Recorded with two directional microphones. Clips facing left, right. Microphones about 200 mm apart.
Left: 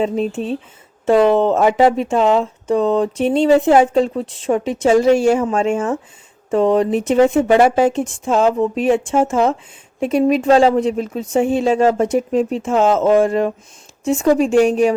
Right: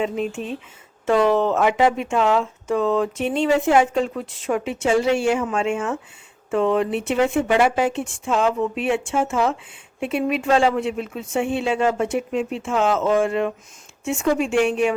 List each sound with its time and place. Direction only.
0.0 s speech: 35° left (ahead or behind)